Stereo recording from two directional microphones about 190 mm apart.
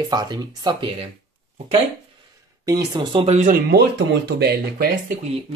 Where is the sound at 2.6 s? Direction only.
20° right (ahead or behind); by 3.5 s 35° right (ahead or behind).